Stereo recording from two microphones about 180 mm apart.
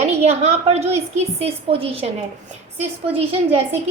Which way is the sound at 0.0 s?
35° right (ahead or behind).